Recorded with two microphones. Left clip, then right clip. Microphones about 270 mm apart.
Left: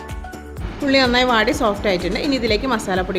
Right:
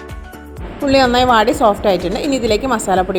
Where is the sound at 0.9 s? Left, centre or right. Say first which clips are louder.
Right 4 dB; centre.